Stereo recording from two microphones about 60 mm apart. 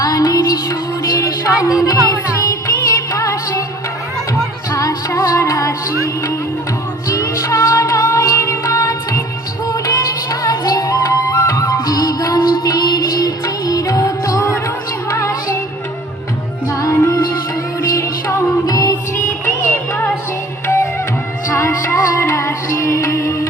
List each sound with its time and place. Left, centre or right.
0.0 s music: left
4.7 s music: left
9.6 s music: left
16.6 s music: left
18.6 s music: left
19.1 s a sound: left
21.5 s music: left